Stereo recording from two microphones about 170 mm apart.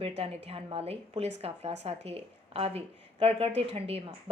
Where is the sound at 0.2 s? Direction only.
35° right (ahead or behind).